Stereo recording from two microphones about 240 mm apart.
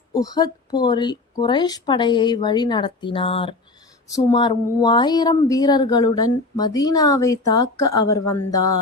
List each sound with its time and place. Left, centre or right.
0.1 s speech: centre